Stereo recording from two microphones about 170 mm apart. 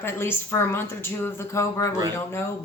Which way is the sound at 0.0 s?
15° left (ahead or behind).